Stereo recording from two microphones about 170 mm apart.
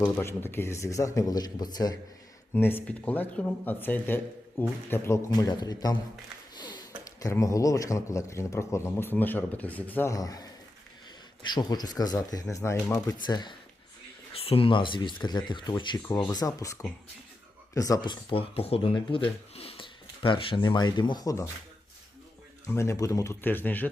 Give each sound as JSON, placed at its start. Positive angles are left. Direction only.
{"t": 0.0, "sound": "speech", "side_deg": 15}
{"t": 2.5, "sound": "speech", "side_deg": 10}
{"t": 11.5, "sound": "speech", "side_deg": 25}
{"t": 22.6, "sound": "speech", "side_deg": 15}